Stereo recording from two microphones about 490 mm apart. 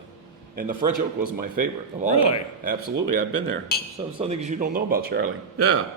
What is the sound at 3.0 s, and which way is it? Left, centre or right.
Speech, right.